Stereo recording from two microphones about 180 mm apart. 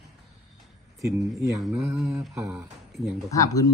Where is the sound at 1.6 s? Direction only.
Centre (ahead or behind).